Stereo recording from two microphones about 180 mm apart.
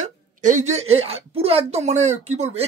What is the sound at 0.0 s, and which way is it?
A woman's voice, 45° right (ahead or behind).